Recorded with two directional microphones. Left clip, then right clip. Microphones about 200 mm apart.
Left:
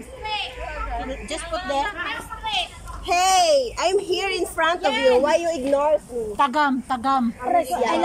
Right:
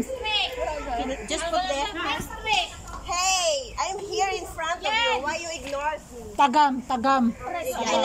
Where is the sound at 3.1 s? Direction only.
55° left (ahead or behind).